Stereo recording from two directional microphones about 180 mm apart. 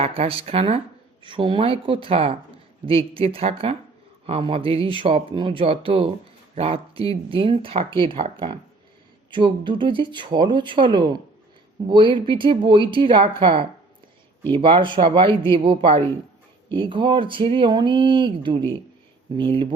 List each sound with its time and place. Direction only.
0.0 s a woman's voice: 30° right (ahead or behind)